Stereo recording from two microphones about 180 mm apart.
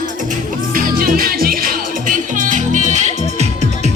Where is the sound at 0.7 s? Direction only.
50° right (ahead or behind).